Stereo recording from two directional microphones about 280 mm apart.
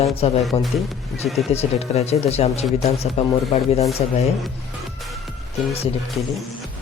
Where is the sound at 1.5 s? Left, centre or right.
Left.